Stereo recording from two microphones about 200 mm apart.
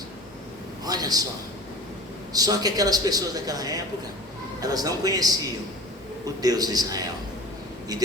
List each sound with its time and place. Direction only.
0.9 s a man's voice: 20° right (ahead or behind)
2.3 s a man's voice: 20° right (ahead or behind)